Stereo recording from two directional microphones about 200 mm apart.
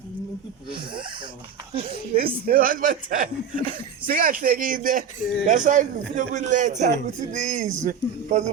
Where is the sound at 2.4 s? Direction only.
45° right (ahead or behind).